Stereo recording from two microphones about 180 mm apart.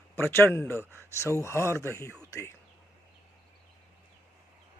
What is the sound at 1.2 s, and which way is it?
Speech, 15° left (ahead or behind).